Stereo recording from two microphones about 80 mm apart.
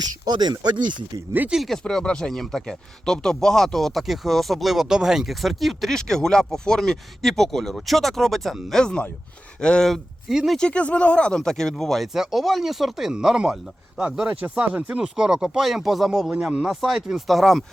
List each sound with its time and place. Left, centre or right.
0.3 s speech: right
1.5 s speech: centre
10.6 s speech: centre